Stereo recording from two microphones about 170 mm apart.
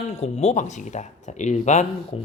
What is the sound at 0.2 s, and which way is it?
Speech, 40° left (ahead or behind).